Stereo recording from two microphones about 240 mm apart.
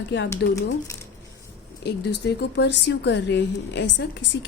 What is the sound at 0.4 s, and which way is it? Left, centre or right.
Speech, left.